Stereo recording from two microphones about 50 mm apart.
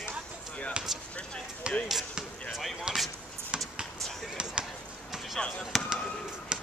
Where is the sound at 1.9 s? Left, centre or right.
Centre.